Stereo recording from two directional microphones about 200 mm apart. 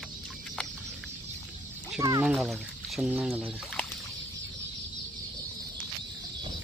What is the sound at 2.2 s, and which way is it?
Speech, centre (ahead or behind).